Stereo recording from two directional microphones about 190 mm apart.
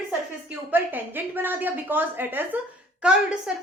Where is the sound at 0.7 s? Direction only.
10° right (ahead or behind).